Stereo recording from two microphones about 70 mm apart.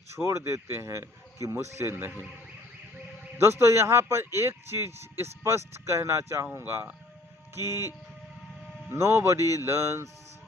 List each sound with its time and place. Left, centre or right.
0.2 s speech: right
1.5 s speech: right
3.3 s speech: right
8.9 s speech: right